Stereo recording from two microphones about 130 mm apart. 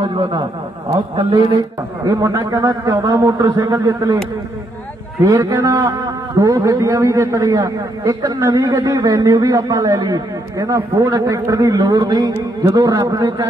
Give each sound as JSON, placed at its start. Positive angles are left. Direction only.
{"t": 0.2, "sound": "a man's voice", "side_deg": -35}
{"t": 2.0, "sound": "a man's voice", "side_deg": -25}
{"t": 5.2, "sound": "a man's voice", "side_deg": -30}